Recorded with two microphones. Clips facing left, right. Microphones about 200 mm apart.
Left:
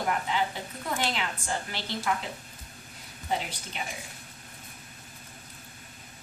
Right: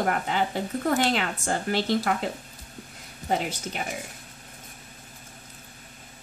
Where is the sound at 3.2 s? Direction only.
50° right (ahead or behind).